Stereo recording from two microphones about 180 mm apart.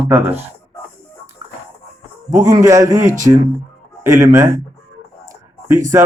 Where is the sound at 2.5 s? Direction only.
20° right (ahead or behind).